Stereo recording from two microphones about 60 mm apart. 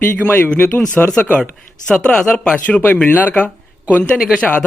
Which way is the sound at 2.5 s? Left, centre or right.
Left.